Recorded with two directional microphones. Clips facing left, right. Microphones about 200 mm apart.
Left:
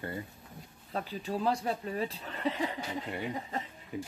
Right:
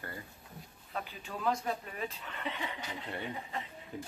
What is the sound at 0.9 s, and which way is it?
Speech, 35° left (ahead or behind).